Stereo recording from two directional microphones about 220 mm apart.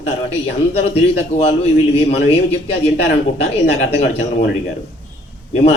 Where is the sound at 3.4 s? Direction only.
30° left (ahead or behind).